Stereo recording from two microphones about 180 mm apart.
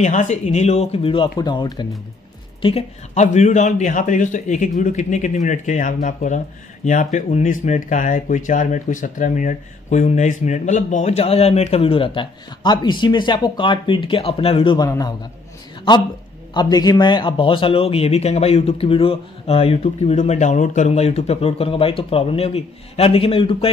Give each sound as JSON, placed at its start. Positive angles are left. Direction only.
{"t": 0.0, "sound": "speech", "side_deg": 40}
{"t": 2.6, "sound": "speech", "side_deg": 35}
{"t": 16.5, "sound": "speech", "side_deg": 20}